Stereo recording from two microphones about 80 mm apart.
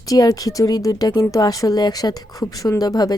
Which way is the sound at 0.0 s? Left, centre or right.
Left.